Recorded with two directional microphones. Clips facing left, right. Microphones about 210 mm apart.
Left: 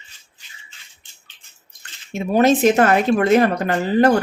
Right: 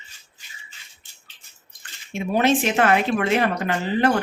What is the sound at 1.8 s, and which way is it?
Speech, 40° left (ahead or behind).